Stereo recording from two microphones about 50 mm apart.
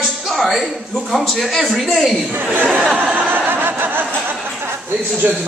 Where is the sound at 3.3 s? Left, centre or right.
Right.